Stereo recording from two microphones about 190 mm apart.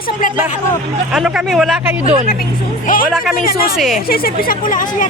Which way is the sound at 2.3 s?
45° left (ahead or behind).